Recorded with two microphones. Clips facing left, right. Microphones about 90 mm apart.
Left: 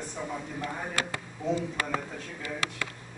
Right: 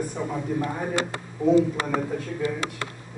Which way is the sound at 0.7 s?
20° right (ahead or behind).